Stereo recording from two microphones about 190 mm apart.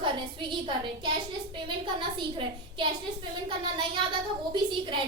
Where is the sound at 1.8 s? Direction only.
25° right (ahead or behind).